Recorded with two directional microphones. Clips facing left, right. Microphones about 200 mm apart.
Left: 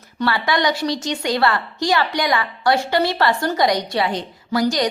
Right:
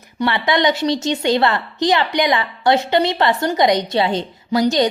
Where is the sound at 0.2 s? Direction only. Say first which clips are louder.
Right 2 dB; 20° right (ahead or behind).